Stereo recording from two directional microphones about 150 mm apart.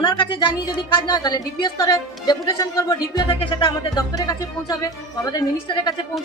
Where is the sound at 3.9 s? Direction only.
25° left (ahead or behind).